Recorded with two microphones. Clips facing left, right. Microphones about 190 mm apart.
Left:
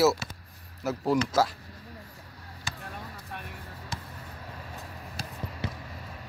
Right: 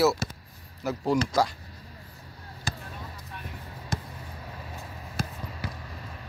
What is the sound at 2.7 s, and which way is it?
Basketball bounce, 40° right (ahead or behind).